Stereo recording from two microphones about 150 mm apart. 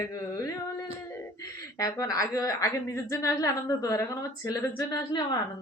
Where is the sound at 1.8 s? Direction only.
25° left (ahead or behind).